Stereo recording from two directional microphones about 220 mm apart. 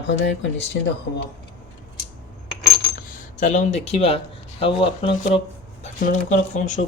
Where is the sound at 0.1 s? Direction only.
55° left (ahead or behind).